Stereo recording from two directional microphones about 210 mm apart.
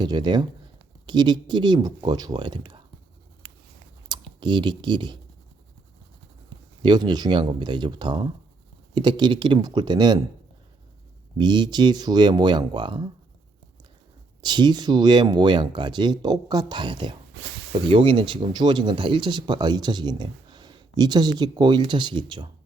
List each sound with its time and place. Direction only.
0.0 s speech: 20° right (ahead or behind)
4.1 s speech: 20° right (ahead or behind)
6.8 s speech: 20° right (ahead or behind)
11.3 s speech: 20° right (ahead or behind)
14.4 s speech: 20° right (ahead or behind)